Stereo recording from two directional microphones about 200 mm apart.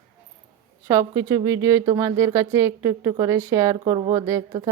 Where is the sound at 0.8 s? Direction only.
15° right (ahead or behind).